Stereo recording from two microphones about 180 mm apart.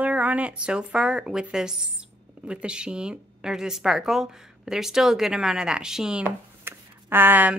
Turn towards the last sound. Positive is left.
turn(degrees=-10)  # may be behind; listen again after turning